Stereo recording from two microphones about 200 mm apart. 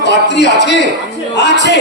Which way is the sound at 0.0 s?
60° left (ahead or behind).